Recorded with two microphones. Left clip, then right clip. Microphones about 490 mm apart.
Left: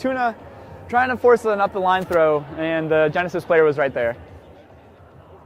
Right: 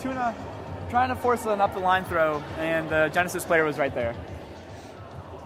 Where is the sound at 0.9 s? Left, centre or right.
Left.